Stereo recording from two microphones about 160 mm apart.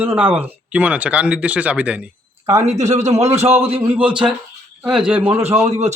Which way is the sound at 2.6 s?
45° right (ahead or behind).